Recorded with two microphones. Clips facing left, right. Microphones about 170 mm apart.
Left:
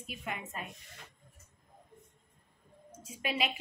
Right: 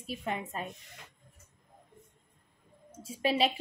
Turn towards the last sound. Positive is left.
turn(degrees=-30)  # may be behind; listen again after turning